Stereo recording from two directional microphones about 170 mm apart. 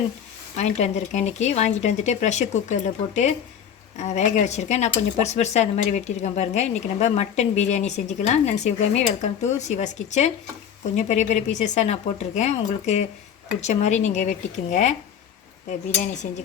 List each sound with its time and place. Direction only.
0.5 s speech: 40° left (ahead or behind)
16.0 s speech: 45° left (ahead or behind)